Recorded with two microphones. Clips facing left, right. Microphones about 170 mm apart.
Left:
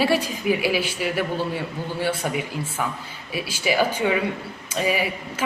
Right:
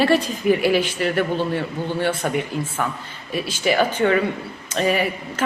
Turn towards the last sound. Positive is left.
turn(degrees=5)  # may be behind; listen again after turning